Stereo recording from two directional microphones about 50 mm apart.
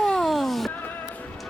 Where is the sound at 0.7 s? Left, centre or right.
Left.